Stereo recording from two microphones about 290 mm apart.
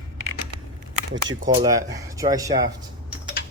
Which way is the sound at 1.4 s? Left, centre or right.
Centre.